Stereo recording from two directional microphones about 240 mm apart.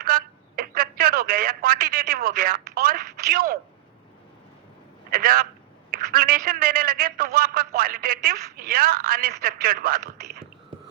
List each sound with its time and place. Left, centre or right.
0.0 s telephone: right
5.1 s speech: right